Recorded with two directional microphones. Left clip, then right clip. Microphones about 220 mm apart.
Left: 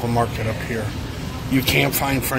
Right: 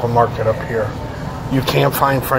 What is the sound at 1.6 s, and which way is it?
Speech, 10° left (ahead or behind).